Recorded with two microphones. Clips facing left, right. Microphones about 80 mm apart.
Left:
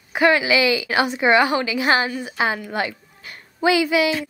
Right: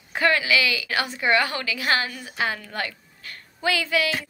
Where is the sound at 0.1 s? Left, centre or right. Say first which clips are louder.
Left 4 dB; centre.